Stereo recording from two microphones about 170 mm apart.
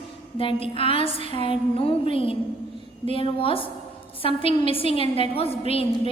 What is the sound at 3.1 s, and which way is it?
A woman's voice, 30° left (ahead or behind).